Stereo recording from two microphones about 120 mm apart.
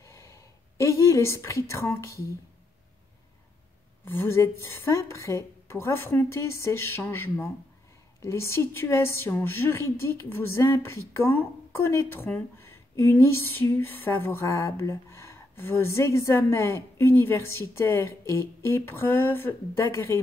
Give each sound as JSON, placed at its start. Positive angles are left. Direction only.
{"t": 0.0, "sound": "speech", "side_deg": 25}
{"t": 4.0, "sound": "a woman's voice", "side_deg": 20}